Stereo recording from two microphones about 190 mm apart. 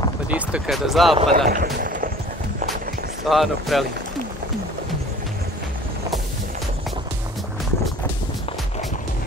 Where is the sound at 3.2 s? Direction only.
Centre (ahead or behind).